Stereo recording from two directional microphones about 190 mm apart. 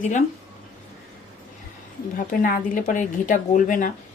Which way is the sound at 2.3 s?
45° left (ahead or behind).